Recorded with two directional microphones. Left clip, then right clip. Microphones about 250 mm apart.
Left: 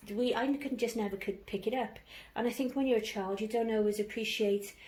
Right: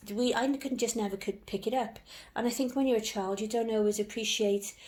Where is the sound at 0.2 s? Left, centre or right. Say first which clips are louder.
Right 2 dB; right.